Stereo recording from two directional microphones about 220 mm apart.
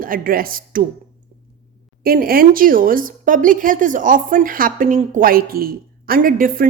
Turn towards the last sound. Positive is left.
turn(degrees=-40)  # may be behind; listen again after turning